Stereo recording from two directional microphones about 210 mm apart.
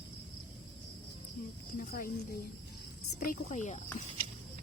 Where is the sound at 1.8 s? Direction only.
45° left (ahead or behind).